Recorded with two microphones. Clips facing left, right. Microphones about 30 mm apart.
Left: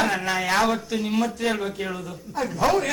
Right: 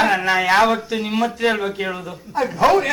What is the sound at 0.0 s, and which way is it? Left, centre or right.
Speech, right.